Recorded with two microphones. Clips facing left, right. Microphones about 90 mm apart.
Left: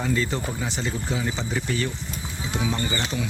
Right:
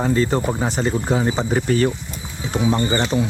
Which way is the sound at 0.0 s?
40° right (ahead or behind).